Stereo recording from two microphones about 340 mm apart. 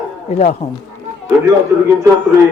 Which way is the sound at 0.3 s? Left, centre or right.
Centre.